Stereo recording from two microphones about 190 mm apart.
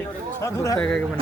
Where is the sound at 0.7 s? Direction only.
5° left (ahead or behind).